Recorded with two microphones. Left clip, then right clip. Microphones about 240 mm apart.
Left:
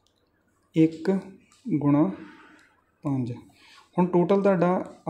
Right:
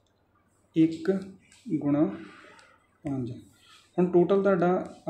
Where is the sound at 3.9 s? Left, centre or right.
Left.